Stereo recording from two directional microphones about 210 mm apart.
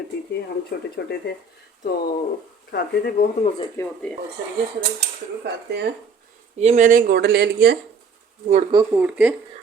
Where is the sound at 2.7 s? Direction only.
50° left (ahead or behind).